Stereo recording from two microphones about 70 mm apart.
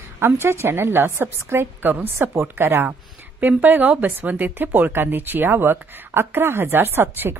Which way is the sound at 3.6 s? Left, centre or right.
Right.